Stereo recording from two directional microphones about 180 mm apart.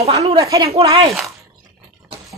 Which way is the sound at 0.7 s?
30° right (ahead or behind).